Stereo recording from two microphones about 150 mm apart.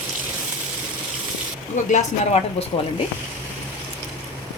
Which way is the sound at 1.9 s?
45° left (ahead or behind).